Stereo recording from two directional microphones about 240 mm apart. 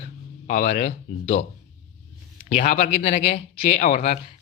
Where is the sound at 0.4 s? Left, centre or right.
Left.